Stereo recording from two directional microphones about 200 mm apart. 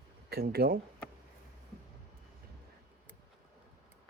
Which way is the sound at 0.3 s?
50° right (ahead or behind).